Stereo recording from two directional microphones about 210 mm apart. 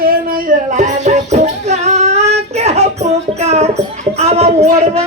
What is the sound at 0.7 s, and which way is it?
Music, 35° right (ahead or behind).